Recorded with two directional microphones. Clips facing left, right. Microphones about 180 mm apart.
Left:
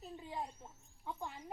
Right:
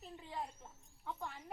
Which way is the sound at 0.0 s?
15° left (ahead or behind).